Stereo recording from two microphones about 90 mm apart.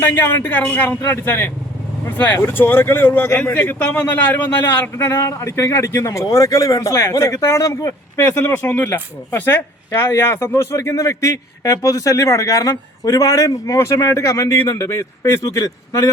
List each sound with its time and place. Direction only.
0.0 s a man's voice: 25° left (ahead or behind)
5.0 s speech: 35° left (ahead or behind)